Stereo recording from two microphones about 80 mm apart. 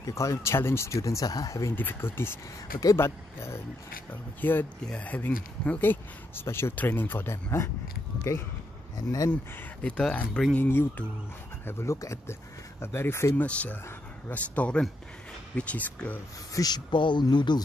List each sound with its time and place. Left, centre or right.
0.0 s speech: left
1.8 s speech: left
8.9 s speech: left
9.3 s speech: centre
10.5 s speech: left
11.6 s speech: left
13.4 s speech: centre
16.5 s speech: left